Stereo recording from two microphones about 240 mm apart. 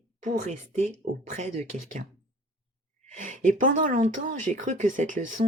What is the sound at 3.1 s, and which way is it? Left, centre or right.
Speech, right.